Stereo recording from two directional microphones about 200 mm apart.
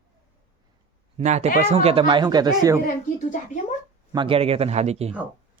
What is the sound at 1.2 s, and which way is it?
Speech, 35° right (ahead or behind).